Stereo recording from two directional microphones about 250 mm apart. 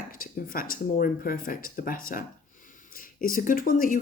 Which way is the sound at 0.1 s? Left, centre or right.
Left.